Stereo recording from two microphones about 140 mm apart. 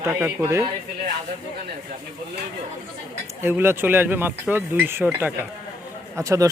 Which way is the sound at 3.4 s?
15° right (ahead or behind).